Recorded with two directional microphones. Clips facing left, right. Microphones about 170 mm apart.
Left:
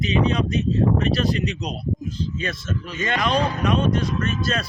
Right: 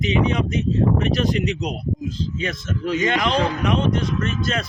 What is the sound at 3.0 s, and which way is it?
Speech, 20° right (ahead or behind).